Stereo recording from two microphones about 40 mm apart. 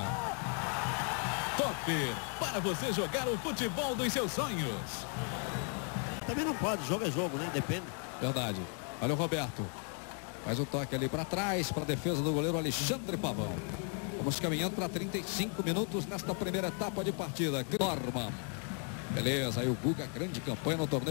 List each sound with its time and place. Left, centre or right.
0.1 s a sound: centre
4.4 s speech: centre
10.5 s speech: centre
14.5 s speech: centre